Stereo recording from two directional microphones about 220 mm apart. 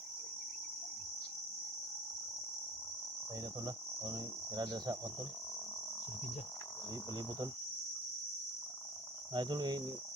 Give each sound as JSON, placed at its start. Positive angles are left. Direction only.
{"t": 3.7, "sound": "cricket", "side_deg": -15}
{"t": 9.3, "sound": "cricket", "side_deg": -20}